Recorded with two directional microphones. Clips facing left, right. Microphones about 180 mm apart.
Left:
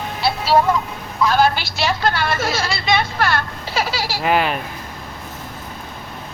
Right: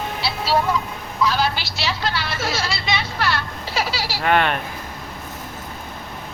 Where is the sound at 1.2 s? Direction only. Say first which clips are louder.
Left 5 dB; 50° left (ahead or behind).